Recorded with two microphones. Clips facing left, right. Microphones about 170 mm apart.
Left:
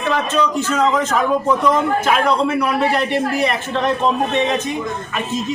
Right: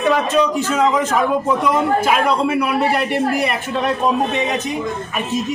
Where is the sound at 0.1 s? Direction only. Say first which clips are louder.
Right 1 dB; 10° right (ahead or behind).